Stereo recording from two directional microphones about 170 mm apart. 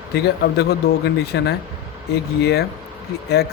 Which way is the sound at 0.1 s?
70° left (ahead or behind).